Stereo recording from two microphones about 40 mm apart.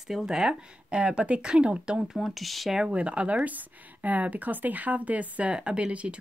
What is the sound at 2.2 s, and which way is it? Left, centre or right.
Speech, centre.